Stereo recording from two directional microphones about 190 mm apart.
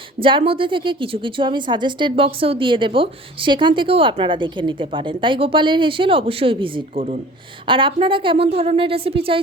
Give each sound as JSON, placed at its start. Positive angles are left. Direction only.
{"t": 0.2, "sound": "a woman's voice", "side_deg": -25}
{"t": 7.7, "sound": "a woman's voice", "side_deg": -25}